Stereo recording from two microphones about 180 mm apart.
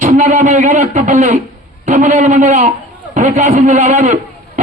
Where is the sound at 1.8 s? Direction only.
40° right (ahead or behind).